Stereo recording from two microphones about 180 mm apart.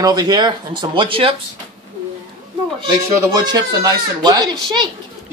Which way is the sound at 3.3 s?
20° right (ahead or behind).